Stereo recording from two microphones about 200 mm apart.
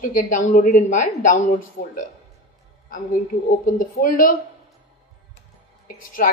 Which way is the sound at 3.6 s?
45° left (ahead or behind).